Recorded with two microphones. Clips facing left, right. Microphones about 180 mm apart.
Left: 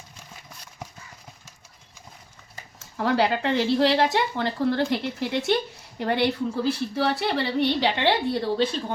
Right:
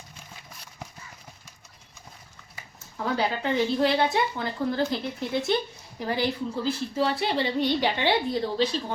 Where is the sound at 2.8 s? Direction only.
85° left.